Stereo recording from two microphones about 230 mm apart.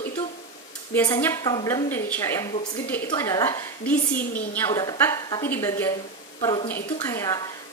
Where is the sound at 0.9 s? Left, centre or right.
Centre.